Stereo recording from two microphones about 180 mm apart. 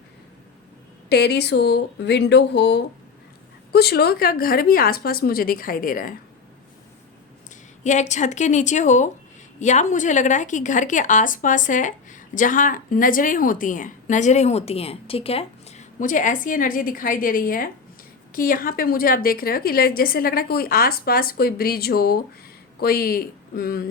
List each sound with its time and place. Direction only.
1.1 s a woman's voice: 65° left (ahead or behind); by 6.1 s 50° left (ahead or behind)
7.9 s a woman's voice: 40° left (ahead or behind)